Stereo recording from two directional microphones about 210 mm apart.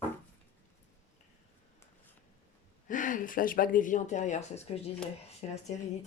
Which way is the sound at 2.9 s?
40° left (ahead or behind).